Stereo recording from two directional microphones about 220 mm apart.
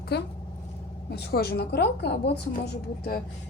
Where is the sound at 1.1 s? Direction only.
45° left (ahead or behind).